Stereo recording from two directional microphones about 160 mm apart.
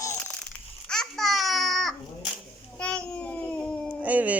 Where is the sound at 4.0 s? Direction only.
10° right (ahead or behind).